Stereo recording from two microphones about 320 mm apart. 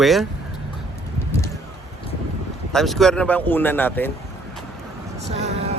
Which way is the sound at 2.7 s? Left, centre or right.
Centre.